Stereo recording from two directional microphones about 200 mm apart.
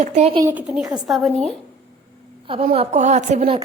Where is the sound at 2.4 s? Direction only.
25° right (ahead or behind).